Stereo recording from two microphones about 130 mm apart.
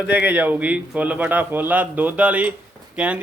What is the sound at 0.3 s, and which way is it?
A man's voice, 10° right (ahead or behind).